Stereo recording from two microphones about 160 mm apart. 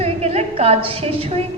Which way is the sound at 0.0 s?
40° right (ahead or behind).